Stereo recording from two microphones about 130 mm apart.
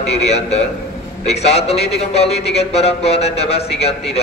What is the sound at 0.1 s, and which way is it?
A man's voice, 55° left (ahead or behind).